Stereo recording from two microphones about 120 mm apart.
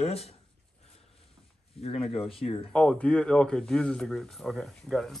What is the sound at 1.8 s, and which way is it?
Speech, 55° left (ahead or behind).